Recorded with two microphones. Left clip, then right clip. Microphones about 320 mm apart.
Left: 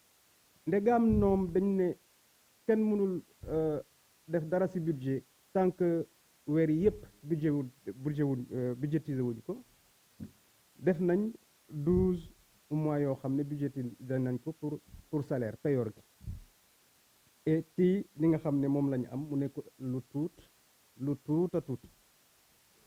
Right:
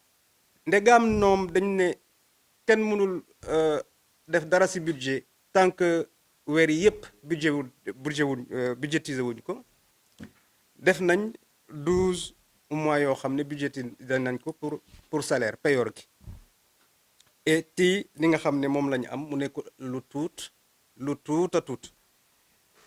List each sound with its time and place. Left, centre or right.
0.6 s speech: centre
10.8 s speech: centre
15.2 s speech: centre
17.4 s speech: centre